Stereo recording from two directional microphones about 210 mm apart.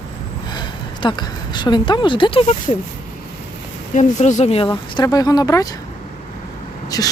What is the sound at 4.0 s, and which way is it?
Speech, 35° left (ahead or behind).